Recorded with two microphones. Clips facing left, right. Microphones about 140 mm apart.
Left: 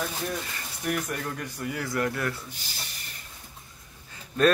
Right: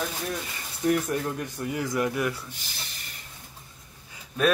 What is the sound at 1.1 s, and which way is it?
Speech, 25° right (ahead or behind).